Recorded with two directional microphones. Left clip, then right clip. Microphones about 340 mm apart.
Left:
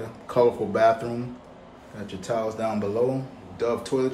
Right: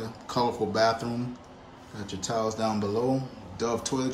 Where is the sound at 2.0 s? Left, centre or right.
Centre.